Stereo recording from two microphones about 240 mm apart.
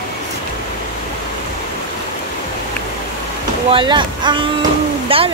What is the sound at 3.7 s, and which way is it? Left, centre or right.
Speech, centre.